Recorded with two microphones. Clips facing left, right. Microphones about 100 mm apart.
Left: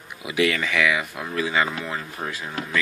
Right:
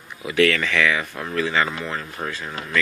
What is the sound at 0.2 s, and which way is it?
Speech, 15° left (ahead or behind).